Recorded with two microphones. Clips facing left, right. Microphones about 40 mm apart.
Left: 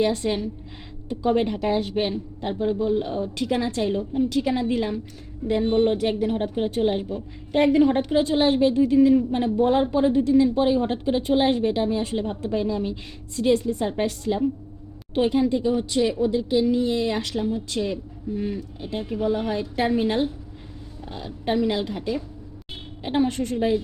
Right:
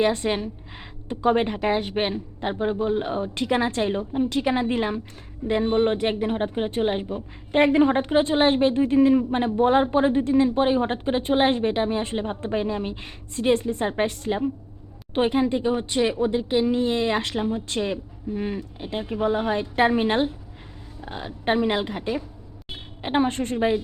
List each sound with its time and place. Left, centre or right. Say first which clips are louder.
0.0 s a woman's voice: right 1 dB; right
5.6 s a woman's voice: left 1 dB; right